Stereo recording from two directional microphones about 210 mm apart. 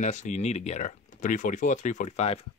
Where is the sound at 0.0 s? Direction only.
35° left (ahead or behind).